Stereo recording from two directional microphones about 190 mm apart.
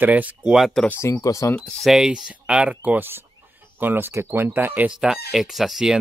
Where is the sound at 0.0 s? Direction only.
10° right (ahead or behind).